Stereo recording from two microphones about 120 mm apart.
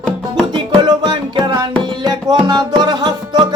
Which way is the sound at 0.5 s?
35° right (ahead or behind).